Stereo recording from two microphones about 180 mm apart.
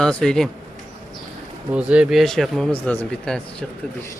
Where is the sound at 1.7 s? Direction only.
5° right (ahead or behind).